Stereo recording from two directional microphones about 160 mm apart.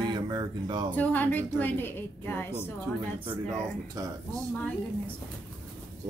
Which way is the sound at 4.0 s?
20° right (ahead or behind).